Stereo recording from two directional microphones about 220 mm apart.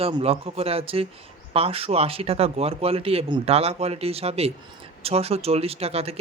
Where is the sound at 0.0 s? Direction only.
25° right (ahead or behind).